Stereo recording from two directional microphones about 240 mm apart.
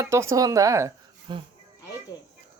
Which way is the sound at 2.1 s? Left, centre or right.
Centre.